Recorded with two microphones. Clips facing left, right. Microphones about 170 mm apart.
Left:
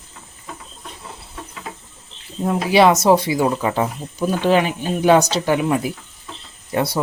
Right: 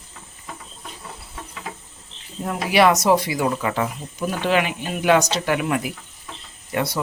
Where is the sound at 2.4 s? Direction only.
25° left (ahead or behind).